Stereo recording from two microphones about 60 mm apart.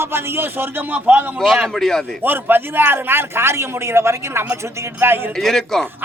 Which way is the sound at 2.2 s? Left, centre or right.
Right.